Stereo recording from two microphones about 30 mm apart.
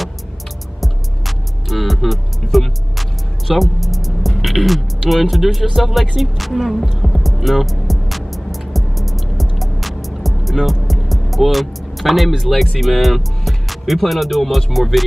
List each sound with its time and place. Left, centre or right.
0.7 s music: centre
5.3 s speech: centre
7.0 s music: centre
14.7 s speech: centre